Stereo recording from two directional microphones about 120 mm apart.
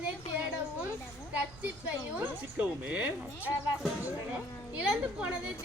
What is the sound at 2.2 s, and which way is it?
Speech, 15° right (ahead or behind).